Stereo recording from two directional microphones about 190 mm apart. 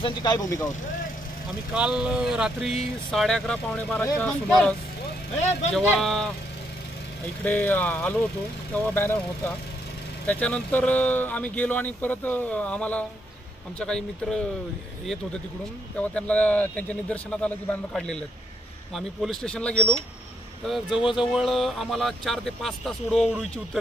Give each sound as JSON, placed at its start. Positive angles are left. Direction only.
{"t": 0.0, "sound": "speech", "side_deg": 20}
{"t": 1.7, "sound": "speech", "side_deg": -5}
{"t": 5.8, "sound": "speech", "side_deg": 0}
{"t": 7.4, "sound": "speech", "side_deg": 10}
{"t": 10.2, "sound": "speech", "side_deg": 5}
{"t": 16.0, "sound": "speech", "side_deg": 5}